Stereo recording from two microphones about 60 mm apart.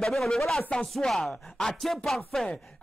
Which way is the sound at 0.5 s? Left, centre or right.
Centre.